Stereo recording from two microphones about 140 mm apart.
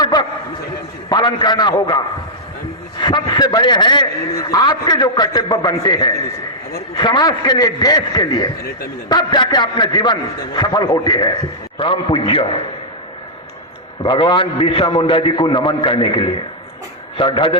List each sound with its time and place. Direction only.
0.0 s a sound: 30° left (ahead or behind)
1.1 s a man's voice: 35° left (ahead or behind)
3.0 s a man's voice: 35° left (ahead or behind)
14.0 s a man's voice: 35° left (ahead or behind)